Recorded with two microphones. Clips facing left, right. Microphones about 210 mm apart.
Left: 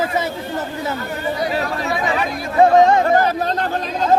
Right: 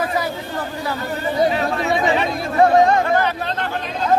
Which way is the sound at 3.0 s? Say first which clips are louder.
Left 3 dB; 40° left (ahead or behind).